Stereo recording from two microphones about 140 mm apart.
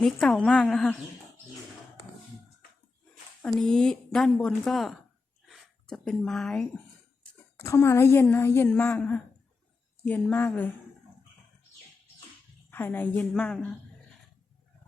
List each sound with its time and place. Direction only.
0.0 s speech: 5° left (ahead or behind)
3.4 s speech: 5° left (ahead or behind)
7.6 s speech: 20° left (ahead or behind)
12.7 s speech: 15° left (ahead or behind)